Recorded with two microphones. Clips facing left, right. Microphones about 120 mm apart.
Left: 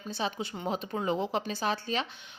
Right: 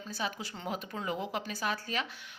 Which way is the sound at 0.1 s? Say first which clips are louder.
Left 4 dB; 25° left (ahead or behind).